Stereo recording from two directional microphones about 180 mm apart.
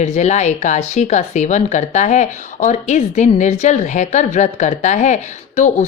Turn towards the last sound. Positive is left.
turn(degrees=40)  # may be behind; listen again after turning